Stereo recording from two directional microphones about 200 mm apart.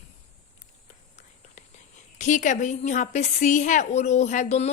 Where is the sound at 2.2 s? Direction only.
40° left (ahead or behind).